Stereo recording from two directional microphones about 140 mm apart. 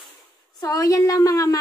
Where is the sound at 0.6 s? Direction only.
25° left (ahead or behind).